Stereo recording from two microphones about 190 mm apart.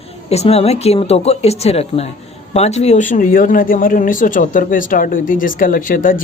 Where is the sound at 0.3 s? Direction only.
35° left (ahead or behind).